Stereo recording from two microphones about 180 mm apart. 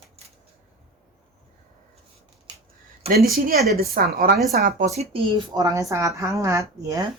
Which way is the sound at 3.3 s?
55° right (ahead or behind).